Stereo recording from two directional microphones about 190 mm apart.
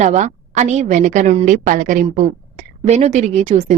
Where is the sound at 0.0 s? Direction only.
40° right (ahead or behind).